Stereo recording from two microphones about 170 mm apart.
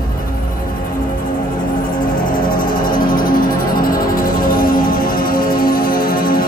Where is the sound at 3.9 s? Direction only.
55° left (ahead or behind).